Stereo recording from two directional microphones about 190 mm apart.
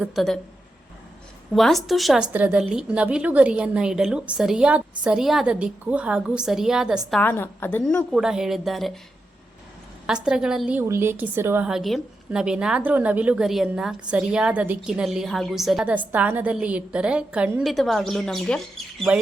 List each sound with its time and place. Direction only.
0.0 s a woman's voice: centre (ahead or behind)
1.5 s a woman's voice: centre (ahead or behind)
7.1 s a woman's voice: 10° left (ahead or behind)
10.1 s a woman's voice: 5° right (ahead or behind)